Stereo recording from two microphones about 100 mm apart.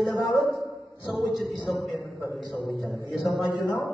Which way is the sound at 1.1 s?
Centre (ahead or behind).